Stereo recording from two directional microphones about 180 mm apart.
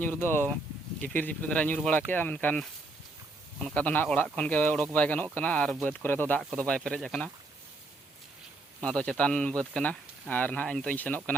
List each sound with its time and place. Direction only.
0.0 s speech: 10° left (ahead or behind)
8.8 s speech: 5° left (ahead or behind)